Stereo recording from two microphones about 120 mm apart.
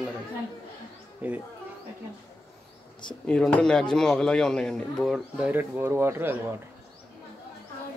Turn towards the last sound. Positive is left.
turn(degrees=-15)  # may be behind; listen again after turning